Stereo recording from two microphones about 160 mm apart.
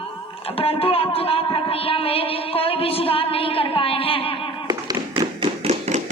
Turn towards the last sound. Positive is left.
turn(degrees=-45)  # may be behind; listen again after turning